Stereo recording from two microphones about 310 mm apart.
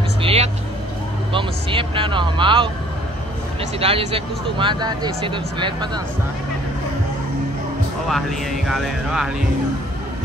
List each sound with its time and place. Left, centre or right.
0.2 s vehicle: centre
1.3 s speech: centre
3.8 s speech: centre
8.1 s speech: centre